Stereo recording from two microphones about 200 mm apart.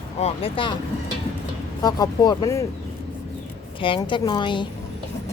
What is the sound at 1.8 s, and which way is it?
Speech, 20° left (ahead or behind).